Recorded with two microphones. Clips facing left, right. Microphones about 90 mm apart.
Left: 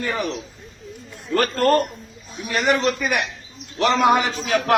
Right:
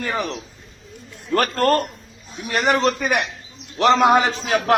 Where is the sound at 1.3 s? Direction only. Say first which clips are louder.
Even; 45° right (ahead or behind).